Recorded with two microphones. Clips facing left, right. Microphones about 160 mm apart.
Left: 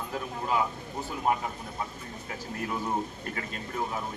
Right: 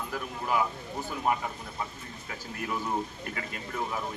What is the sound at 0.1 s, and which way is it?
Speech, 30° left (ahead or behind).